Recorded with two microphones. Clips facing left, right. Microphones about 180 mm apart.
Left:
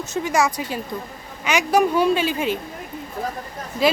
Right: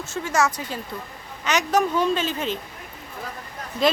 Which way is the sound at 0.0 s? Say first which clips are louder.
Left 2 dB; 15° left (ahead or behind).